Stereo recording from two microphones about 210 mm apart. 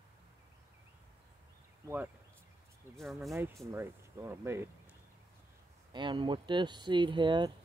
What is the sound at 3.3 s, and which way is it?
Speech, 15° right (ahead or behind).